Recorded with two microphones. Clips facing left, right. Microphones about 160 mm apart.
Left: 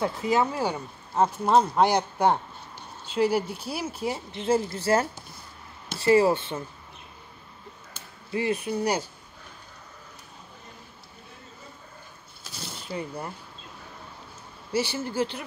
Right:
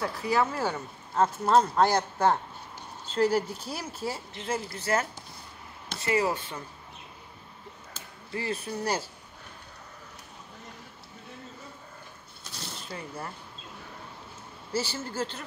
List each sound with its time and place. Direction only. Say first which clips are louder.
0.0 s speech: left 3 dB; 20° left (ahead or behind)
4.5 s speech: left 7 dB; 25° left (ahead or behind)
8.3 s speech: left 6 dB; 20° left (ahead or behind)
12.9 s speech: left 6 dB; 20° left (ahead or behind)
14.7 s speech: left 4 dB; 15° left (ahead or behind)